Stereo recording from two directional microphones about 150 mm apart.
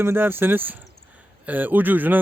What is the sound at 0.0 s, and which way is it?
Speech, 15° right (ahead or behind).